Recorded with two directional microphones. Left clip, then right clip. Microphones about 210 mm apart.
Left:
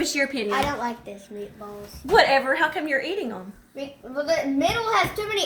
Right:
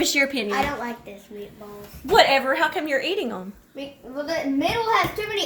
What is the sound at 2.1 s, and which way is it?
A woman's voice, 10° right (ahead or behind).